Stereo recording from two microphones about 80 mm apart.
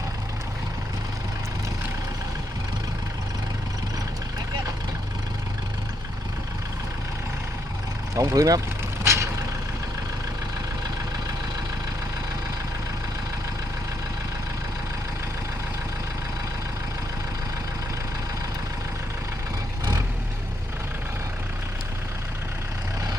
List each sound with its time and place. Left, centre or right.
8.1 s speech: right
9.0 s vehicle: right